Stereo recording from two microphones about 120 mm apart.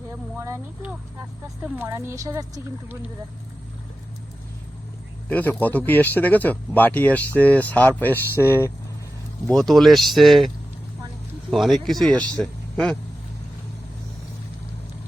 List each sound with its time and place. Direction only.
0.3 s a sound: 25° right (ahead or behind)
1.7 s a woman's voice: 20° right (ahead or behind)
5.3 s speech: 15° left (ahead or behind)
9.5 s speech: centre (ahead or behind)
11.5 s speech: centre (ahead or behind)